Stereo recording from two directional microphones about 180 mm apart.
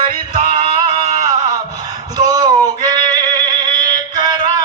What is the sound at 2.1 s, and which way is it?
Singing, 20° right (ahead or behind).